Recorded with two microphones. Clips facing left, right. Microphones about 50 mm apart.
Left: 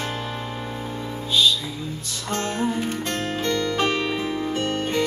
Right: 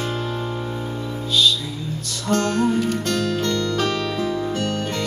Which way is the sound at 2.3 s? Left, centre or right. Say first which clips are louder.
Right 5 dB; left.